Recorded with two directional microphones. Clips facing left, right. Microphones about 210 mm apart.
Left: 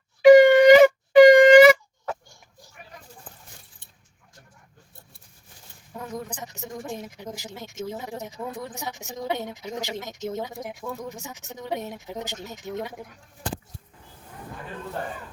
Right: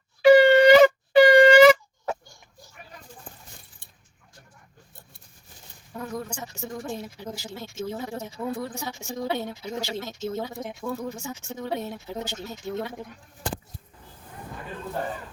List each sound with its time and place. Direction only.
0.2 s shofar: 15° left (ahead or behind)
5.9 s a woman's voice: 20° left (ahead or behind)